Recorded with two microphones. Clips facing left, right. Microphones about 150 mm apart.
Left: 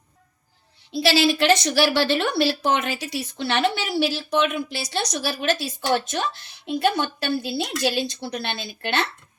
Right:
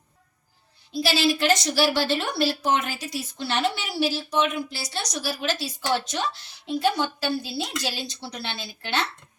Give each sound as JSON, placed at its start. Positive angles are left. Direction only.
{"t": 0.9, "sound": "a woman's voice", "side_deg": 70}